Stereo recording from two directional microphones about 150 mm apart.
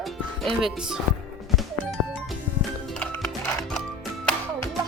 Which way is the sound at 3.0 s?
15° left (ahead or behind).